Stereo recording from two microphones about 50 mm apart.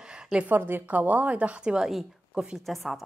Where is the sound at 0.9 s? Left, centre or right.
Right.